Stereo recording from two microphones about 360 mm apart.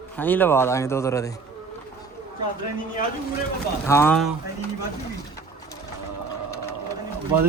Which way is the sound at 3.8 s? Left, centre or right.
Centre.